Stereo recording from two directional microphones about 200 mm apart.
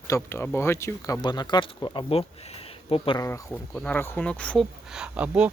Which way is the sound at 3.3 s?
15° left (ahead or behind).